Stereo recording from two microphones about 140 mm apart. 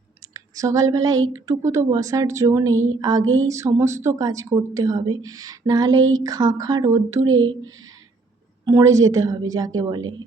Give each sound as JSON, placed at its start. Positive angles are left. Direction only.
{"t": 0.3, "sound": "a woman's voice", "side_deg": -25}
{"t": 8.6, "sound": "a woman's voice", "side_deg": -20}